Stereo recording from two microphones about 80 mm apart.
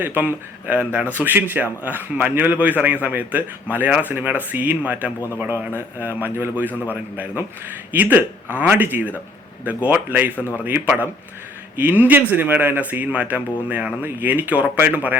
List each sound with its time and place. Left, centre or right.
0.0 s speech: right
6.7 s a man's voice: left
6.9 s speech: right